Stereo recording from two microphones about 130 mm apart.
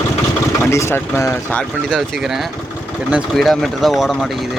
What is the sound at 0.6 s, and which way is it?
Speech, 20° left (ahead or behind).